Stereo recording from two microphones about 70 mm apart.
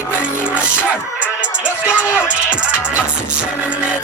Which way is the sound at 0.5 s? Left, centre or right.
Centre.